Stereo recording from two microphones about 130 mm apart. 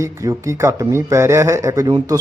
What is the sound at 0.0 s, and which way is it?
Speech, 25° right (ahead or behind).